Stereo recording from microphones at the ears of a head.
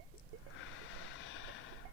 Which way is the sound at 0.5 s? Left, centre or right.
Left.